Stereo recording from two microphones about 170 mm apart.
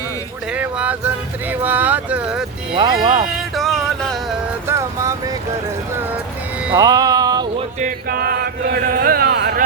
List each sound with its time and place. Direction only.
0.5 s speech: 10° right (ahead or behind)
3.0 s speech: 25° right (ahead or behind)
3.2 s a sound: centre (ahead or behind)
4.6 s a sound: 15° right (ahead or behind)
6.7 s music: 20° right (ahead or behind)
7.8 s chant: 55° right (ahead or behind)